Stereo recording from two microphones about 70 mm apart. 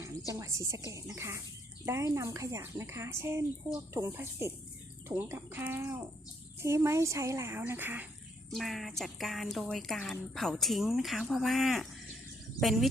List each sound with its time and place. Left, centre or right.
0.3 s speech: right
6.6 s speech: right
7.7 s speech: right
8.4 s speech: centre